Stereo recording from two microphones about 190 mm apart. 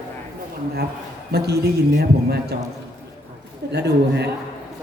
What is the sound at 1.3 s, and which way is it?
Speech, 60° right (ahead or behind).